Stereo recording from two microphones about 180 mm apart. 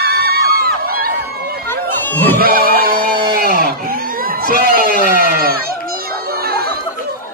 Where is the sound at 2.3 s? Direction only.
55° right (ahead or behind).